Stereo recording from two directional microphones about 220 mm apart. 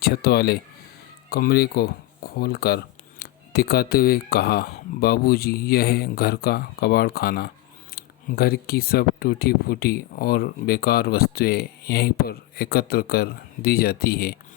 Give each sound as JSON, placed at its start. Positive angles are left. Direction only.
{"t": 0.0, "sound": "speech", "side_deg": 45}